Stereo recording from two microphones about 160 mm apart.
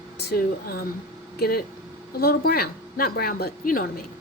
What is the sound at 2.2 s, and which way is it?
A woman's voice, 75° left (ahead or behind).